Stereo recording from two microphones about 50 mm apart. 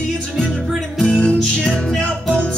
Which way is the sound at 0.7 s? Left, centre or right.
Centre.